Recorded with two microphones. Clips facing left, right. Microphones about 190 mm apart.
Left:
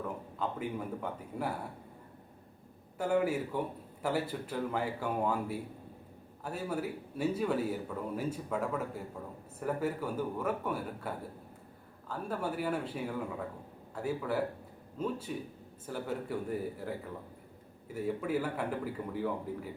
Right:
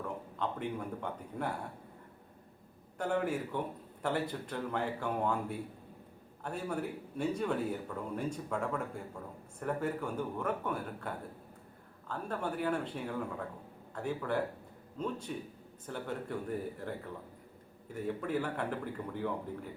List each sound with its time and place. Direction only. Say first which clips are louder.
0.0 s speech: left 1 dB; 5° left (ahead or behind)
3.0 s a man's voice: left 3 dB; 5° left (ahead or behind)